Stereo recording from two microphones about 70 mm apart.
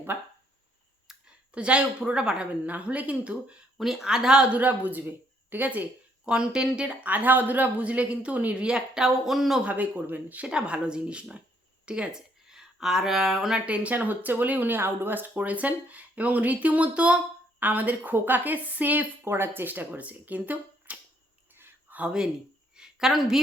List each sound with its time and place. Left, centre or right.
1.1 s a sound: centre
1.5 s a woman's voice: centre
3.8 s a woman's voice: centre
4.5 s a woman's voice: right; by 9.6 s centre
9.6 s a woman's voice: right; by 13.6 s centre
13.7 s speech: centre
19.2 s speech: right
21.5 s a sound: right
22.7 s a sound: centre